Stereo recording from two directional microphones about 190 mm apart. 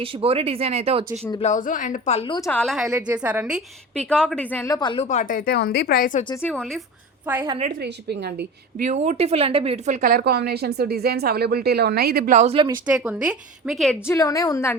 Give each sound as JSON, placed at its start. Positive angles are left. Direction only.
{"t": 0.0, "sound": "speech", "side_deg": -30}
{"t": 1.4, "sound": "a woman's voice", "side_deg": 40}
{"t": 2.5, "sound": "speech", "side_deg": 5}
{"t": 3.9, "sound": "speech", "side_deg": 5}
{"t": 5.0, "sound": "speech", "side_deg": 40}
{"t": 6.2, "sound": "speech", "side_deg": 15}
{"t": 6.5, "sound": "speech", "side_deg": 0}
{"t": 7.6, "sound": "a woman's voice", "side_deg": -55}
{"t": 8.8, "sound": "a woman's voice", "side_deg": -40}
{"t": 12.8, "sound": "speech", "side_deg": -5}
{"t": 14.1, "sound": "speech", "side_deg": 20}